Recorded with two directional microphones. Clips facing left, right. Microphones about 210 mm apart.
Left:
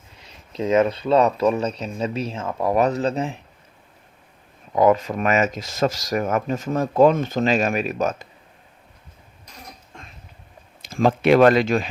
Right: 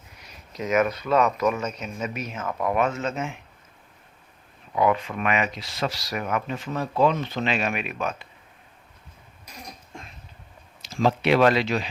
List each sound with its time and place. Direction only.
0.2 s speech: 25° left (ahead or behind)
4.7 s speech: 40° left (ahead or behind)
9.5 s cough: 10° right (ahead or behind)
10.8 s speech: 50° left (ahead or behind)